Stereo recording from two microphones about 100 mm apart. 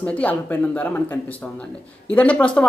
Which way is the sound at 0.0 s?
15° left (ahead or behind).